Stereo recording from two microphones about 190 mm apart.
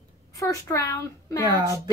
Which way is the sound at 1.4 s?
20° right (ahead or behind).